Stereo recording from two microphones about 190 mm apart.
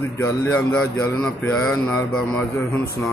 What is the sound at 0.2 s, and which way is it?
Mantra, 15° left (ahead or behind).